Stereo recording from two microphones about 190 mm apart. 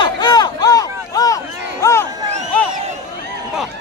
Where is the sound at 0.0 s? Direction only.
20° left (ahead or behind).